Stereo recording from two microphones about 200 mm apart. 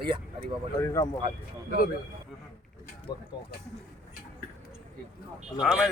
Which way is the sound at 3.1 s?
20° left (ahead or behind).